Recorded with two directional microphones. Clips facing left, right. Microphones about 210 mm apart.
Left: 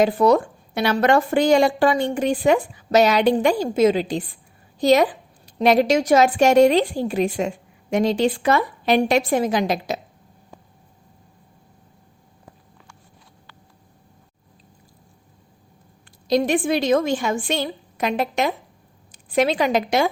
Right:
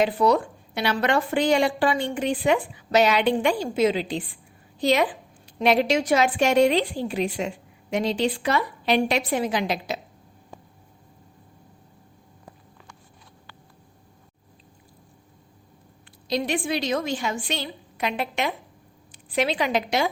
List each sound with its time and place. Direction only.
0.0 s a woman's voice: 45° left (ahead or behind)
16.2 s a woman's voice: 45° left (ahead or behind)